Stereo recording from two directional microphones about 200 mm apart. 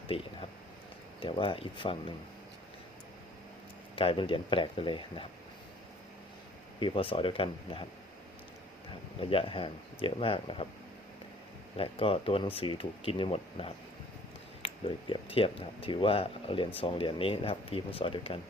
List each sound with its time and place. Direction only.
0.1 s speech: 30° left (ahead or behind)
3.9 s speech: 25° left (ahead or behind)
6.7 s speech: 25° left (ahead or behind)
9.2 s speech: 25° left (ahead or behind)
11.8 s speech: 30° left (ahead or behind)